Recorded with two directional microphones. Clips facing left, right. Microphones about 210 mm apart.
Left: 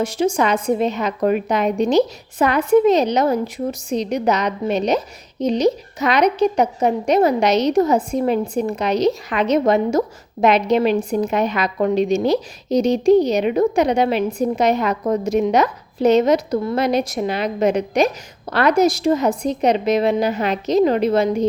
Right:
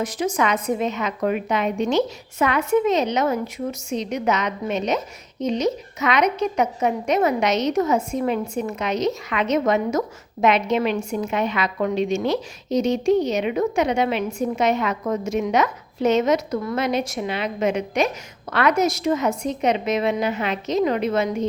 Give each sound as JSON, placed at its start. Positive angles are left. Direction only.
{"t": 0.0, "sound": "a woman's voice", "side_deg": 30}